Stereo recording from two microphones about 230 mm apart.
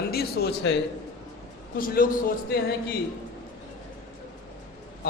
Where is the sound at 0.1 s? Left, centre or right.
Left.